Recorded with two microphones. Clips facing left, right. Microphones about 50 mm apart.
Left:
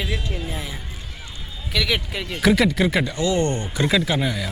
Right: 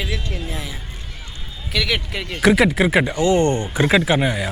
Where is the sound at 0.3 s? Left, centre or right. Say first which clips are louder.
Right 1 dB; centre.